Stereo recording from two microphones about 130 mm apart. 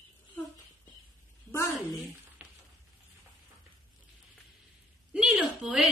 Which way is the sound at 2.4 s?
10° right (ahead or behind).